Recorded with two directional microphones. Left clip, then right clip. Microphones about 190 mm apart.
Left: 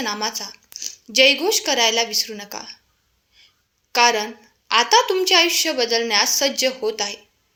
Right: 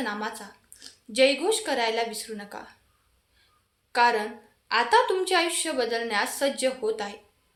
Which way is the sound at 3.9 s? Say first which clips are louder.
Left 5 dB; 30° left (ahead or behind).